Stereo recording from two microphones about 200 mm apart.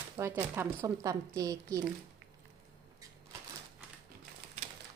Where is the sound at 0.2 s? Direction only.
15° right (ahead or behind).